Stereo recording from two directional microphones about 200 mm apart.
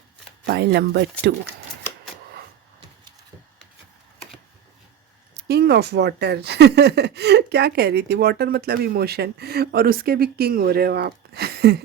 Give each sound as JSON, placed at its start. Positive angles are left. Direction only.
{"t": 0.4, "sound": "speech", "side_deg": -55}
{"t": 5.3, "sound": "speech", "side_deg": -55}